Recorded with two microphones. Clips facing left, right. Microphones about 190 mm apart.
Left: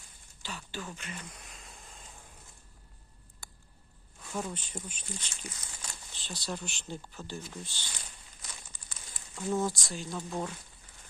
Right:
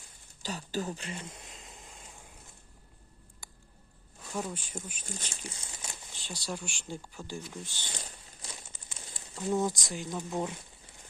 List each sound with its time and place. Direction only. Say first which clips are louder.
0.4 s a sound: right 7 dB; 40° right (ahead or behind); by 2.0 s 20° right (ahead or behind)
3.4 s a sound: even; 15° right (ahead or behind)
4.4 s speech: even; 10° right (ahead or behind)
5.0 s speech: right 1 dB; 45° right (ahead or behind)
5.3 s speech: right 2 dB; 30° right (ahead or behind)
6.2 s speech: even; 10° right (ahead or behind)
7.9 s a sound: right 5 dB; 35° right (ahead or behind)
8.7 s crumpling: right 3 dB; 25° right (ahead or behind)
9.3 s speech: right 1 dB; 15° right (ahead or behind)